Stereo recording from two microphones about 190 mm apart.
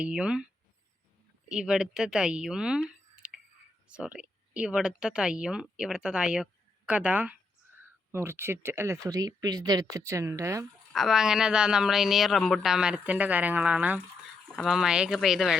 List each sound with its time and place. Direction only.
0.0 s speech: 5° right (ahead or behind)
10.9 s speech: centre (ahead or behind)